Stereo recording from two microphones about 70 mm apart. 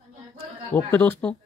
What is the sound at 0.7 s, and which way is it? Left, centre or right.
Speech, left.